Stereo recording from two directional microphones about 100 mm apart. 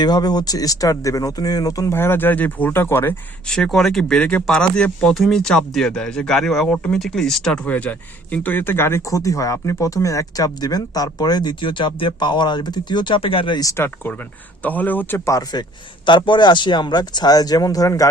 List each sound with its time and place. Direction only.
0.0 s speech: 45° left (ahead or behind)
1.9 s speech: 25° left (ahead or behind)
3.4 s speech: 5° left (ahead or behind); by 13.6 s 60° left (ahead or behind)
13.6 s speech: 30° left (ahead or behind)
16.0 s speech: 55° left (ahead or behind); by 18.1 s 35° left (ahead or behind)